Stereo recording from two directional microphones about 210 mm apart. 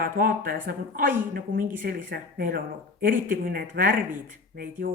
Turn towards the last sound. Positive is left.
turn(degrees=-40)  # may be behind; listen again after turning